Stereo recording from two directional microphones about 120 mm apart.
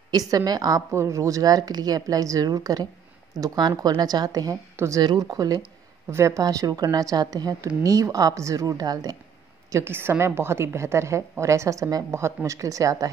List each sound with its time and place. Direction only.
0.3 s speech: 30° right (ahead or behind)
9.7 s speech: 20° right (ahead or behind)